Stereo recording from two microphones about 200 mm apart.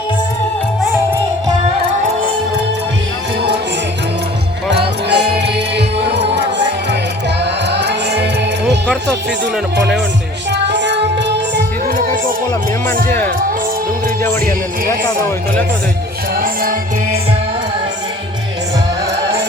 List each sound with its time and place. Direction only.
4.7 s music: 55° right (ahead or behind)
7.4 s music: 60° right (ahead or behind)
10.5 s music: 60° right (ahead or behind)
16.3 s music: 45° right (ahead or behind)